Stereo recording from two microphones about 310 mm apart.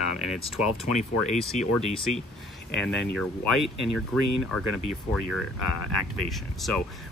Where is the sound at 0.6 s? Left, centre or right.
Centre.